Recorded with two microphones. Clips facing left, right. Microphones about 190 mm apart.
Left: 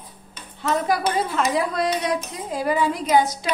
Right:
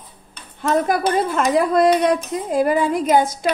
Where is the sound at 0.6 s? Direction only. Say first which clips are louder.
Right 4 dB; 50° right (ahead or behind).